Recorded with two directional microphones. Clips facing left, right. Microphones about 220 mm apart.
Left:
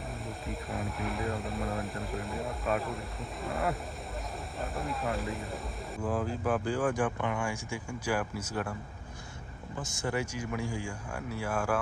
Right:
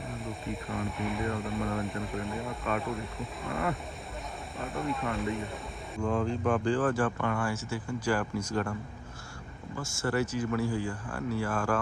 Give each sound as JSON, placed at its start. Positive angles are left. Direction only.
{"t": 0.1, "sound": "speech", "side_deg": 0}
{"t": 9.7, "sound": "speech", "side_deg": 15}